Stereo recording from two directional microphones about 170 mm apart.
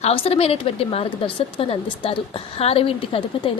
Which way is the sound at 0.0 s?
35° left (ahead or behind).